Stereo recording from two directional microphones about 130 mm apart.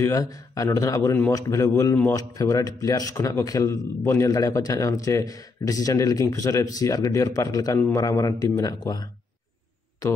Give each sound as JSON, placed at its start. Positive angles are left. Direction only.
{"t": 0.0, "sound": "a man's voice", "side_deg": 25}